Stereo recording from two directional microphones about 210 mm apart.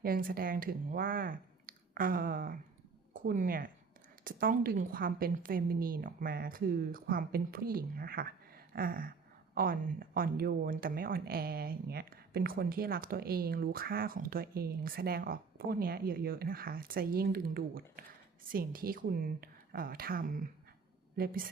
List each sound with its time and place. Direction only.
0.0 s speech: 45° right (ahead or behind)